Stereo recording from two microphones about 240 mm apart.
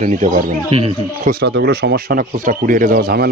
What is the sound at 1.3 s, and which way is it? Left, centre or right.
Speech, right.